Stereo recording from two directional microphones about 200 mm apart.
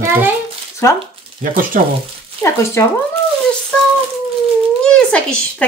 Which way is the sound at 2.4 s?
15° left (ahead or behind).